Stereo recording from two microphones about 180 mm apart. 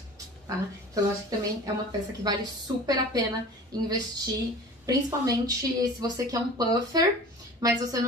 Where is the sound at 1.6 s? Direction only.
20° right (ahead or behind).